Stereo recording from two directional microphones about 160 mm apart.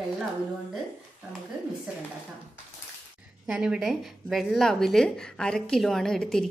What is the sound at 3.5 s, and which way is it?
A woman's voice, 5° right (ahead or behind).